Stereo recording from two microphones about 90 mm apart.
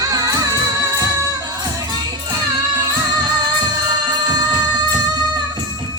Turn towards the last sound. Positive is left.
turn(degrees=-50)  # may be behind; listen again after turning